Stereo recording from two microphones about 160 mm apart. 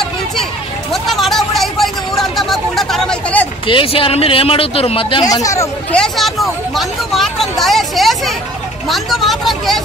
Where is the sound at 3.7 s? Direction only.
35° left (ahead or behind).